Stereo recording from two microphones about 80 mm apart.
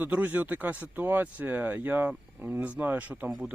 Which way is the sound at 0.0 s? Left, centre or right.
Centre.